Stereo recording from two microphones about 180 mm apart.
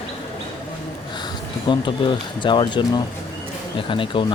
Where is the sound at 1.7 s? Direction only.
25° left (ahead or behind).